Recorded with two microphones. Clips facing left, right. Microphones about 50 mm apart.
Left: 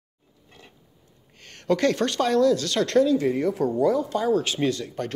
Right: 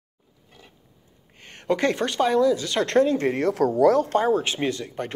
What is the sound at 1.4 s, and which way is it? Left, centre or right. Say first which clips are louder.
Speech: left 1 dB; right.